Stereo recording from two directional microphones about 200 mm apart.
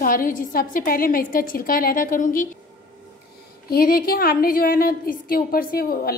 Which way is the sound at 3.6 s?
50° left (ahead or behind).